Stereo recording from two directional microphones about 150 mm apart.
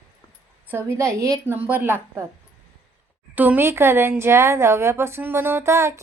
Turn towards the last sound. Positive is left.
turn(degrees=-20)  # may be behind; listen again after turning